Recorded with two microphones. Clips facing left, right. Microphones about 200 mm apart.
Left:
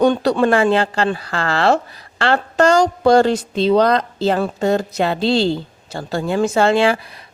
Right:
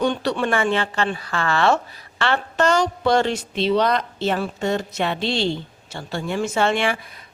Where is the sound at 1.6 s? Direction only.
35° left (ahead or behind).